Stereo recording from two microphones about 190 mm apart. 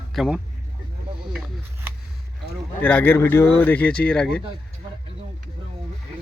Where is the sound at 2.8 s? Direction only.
10° left (ahead or behind).